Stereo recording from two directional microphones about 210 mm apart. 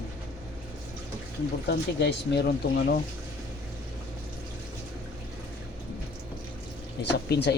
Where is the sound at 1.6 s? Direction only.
50° left (ahead or behind).